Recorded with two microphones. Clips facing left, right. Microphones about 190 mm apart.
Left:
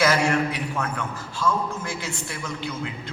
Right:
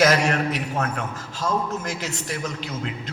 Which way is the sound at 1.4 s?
40° right (ahead or behind).